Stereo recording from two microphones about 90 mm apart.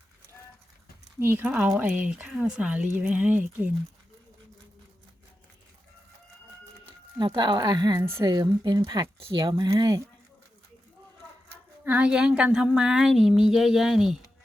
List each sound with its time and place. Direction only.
1.2 s a woman's voice: 25° right (ahead or behind)
7.2 s a woman's voice: 60° right (ahead or behind); by 10.0 s 45° right (ahead or behind)
11.9 s a woman's voice: 15° right (ahead or behind)